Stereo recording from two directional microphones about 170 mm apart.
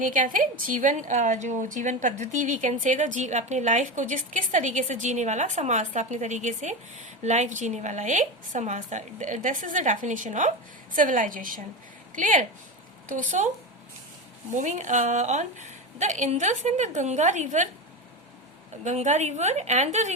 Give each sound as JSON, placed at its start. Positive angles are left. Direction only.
{"t": 0.0, "sound": "a woman's voice", "side_deg": -50}
{"t": 14.5, "sound": "a woman's voice", "side_deg": -45}
{"t": 18.9, "sound": "a woman's voice", "side_deg": -45}